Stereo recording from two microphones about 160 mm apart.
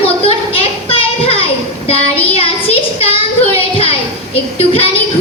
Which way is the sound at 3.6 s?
35° left (ahead or behind).